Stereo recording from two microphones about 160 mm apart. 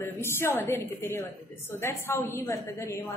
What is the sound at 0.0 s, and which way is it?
A woman's voice, 15° left (ahead or behind).